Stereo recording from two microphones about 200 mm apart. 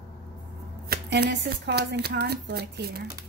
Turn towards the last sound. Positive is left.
turn(degrees=-55)  # may be behind; listen again after turning